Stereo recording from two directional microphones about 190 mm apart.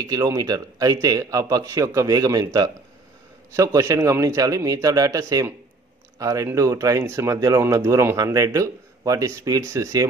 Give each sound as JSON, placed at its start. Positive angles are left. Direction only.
{"t": 0.0, "sound": "a man's voice", "side_deg": -20}